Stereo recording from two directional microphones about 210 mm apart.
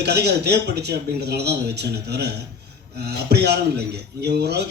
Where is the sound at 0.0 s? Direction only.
50° right (ahead or behind).